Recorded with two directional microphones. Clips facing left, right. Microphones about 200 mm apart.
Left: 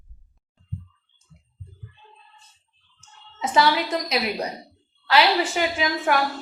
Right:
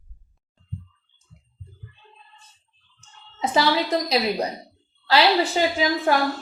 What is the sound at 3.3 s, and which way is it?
A woman's voice, 30° right (ahead or behind).